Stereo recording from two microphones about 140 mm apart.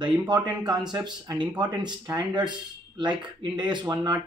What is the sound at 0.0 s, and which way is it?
Speech, 30° right (ahead or behind).